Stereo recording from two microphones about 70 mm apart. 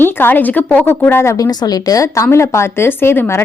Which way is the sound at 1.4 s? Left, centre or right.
Left.